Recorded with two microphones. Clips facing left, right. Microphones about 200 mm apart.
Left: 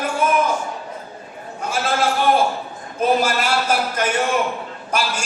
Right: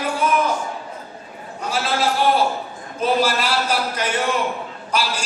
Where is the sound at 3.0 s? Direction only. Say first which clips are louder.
Left 1 dB; 50° left (ahead or behind).